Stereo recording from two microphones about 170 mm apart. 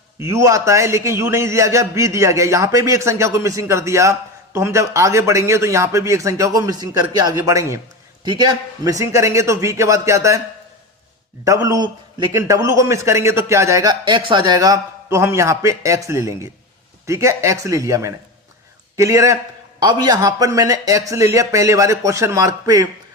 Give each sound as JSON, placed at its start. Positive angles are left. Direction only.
{"t": 0.2, "sound": "a man's voice", "side_deg": -15}
{"t": 11.4, "sound": "a man's voice", "side_deg": -20}